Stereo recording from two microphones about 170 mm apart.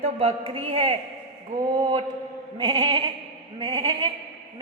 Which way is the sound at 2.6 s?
25° right (ahead or behind).